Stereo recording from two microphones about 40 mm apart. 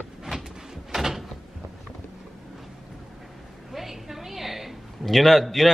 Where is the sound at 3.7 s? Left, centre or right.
Centre.